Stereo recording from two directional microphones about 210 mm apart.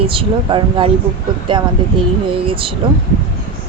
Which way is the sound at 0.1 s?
25° right (ahead or behind).